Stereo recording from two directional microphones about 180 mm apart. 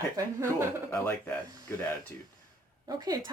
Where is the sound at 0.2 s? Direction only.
15° right (ahead or behind).